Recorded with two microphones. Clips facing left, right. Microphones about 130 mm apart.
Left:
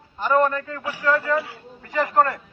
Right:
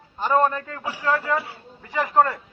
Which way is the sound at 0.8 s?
25° right (ahead or behind).